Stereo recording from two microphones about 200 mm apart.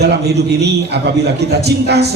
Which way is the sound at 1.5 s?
55° right (ahead or behind).